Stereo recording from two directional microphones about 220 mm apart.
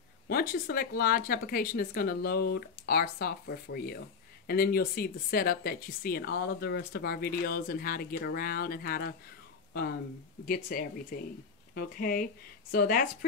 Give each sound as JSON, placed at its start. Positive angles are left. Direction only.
{"t": 0.3, "sound": "speech", "side_deg": 40}
{"t": 10.4, "sound": "speech", "side_deg": 40}